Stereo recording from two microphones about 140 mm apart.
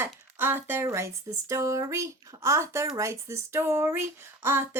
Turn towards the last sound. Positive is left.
turn(degrees=-15)  # may be behind; listen again after turning